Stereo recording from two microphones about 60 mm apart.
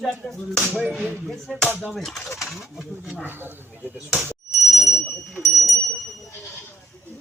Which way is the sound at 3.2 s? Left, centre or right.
Right.